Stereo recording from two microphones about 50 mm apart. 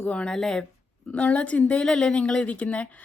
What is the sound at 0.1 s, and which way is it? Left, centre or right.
Speech, left.